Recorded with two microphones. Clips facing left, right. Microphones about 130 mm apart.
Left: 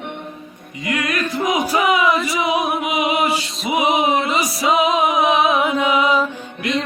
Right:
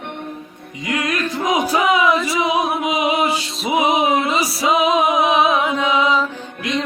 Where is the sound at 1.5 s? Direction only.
15° right (ahead or behind).